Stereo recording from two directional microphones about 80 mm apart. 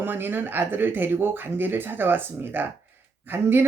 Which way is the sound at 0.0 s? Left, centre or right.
Right.